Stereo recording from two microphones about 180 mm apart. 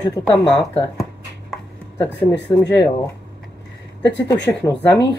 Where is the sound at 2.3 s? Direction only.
75° left (ahead or behind).